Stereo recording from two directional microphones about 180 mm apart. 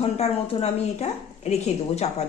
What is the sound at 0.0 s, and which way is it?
A woman's voice, 35° left (ahead or behind).